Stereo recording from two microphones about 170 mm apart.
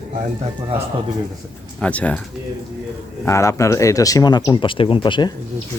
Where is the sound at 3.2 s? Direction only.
15° left (ahead or behind).